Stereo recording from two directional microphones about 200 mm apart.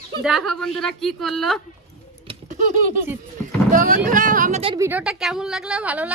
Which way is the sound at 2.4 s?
40° right (ahead or behind).